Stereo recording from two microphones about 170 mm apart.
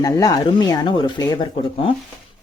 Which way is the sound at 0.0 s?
20° left (ahead or behind).